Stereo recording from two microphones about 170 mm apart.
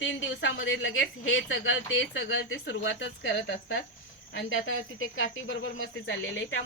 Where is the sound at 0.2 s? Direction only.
90° left.